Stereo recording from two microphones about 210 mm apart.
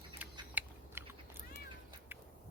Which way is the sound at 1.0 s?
10° right (ahead or behind).